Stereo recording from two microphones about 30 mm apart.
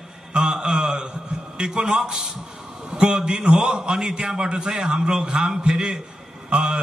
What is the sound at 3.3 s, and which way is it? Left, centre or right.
A man's voice, right.